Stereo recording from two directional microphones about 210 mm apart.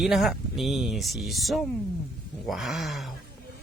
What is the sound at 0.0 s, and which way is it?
Speech, centre (ahead or behind).